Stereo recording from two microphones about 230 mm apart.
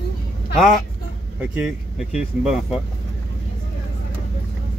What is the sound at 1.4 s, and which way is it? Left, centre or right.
Speech, centre.